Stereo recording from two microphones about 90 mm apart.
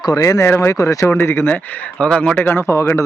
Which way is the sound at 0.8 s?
40° left (ahead or behind).